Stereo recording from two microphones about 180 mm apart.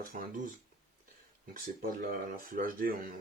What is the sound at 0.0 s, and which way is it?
Speech, 50° right (ahead or behind).